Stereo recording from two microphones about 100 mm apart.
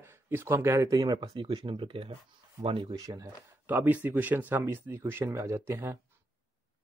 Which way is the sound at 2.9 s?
40° right (ahead or behind).